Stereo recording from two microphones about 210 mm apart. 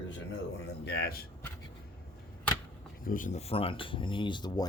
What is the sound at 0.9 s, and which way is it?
Speech, 50° left (ahead or behind).